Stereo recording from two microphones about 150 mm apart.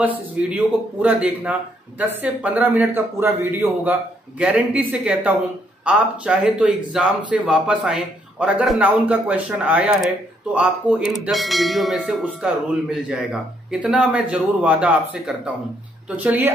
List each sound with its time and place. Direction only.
0.0 s speech: 10° right (ahead or behind)
4.4 s speech: 10° right (ahead or behind)
10.5 s bell: 10° right (ahead or behind)
16.2 s speech: 10° right (ahead or behind)